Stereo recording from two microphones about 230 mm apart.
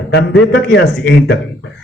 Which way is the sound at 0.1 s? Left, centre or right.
Left.